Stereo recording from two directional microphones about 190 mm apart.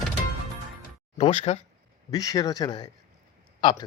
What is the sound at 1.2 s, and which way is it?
Speech, 35° left (ahead or behind).